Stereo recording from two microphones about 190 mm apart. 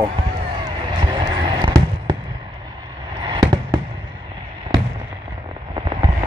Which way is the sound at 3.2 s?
25° right (ahead or behind).